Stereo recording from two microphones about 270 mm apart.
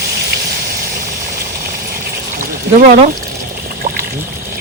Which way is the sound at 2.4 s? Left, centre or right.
Right.